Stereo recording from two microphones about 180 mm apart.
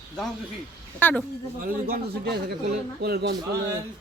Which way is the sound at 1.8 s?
55° right (ahead or behind).